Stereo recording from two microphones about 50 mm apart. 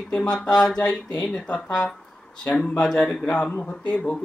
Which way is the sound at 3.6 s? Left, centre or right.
Left.